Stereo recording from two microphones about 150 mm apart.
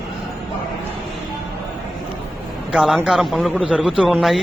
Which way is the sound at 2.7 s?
5° right (ahead or behind).